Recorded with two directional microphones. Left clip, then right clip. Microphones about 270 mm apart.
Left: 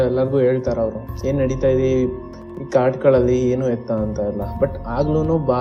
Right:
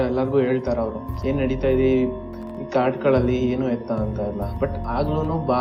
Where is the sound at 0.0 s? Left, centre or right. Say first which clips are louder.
Left 4 dB; left.